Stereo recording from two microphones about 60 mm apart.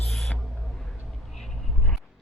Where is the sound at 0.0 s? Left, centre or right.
Centre.